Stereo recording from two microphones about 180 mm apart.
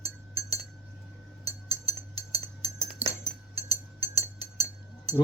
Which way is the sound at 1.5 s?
35° right (ahead or behind).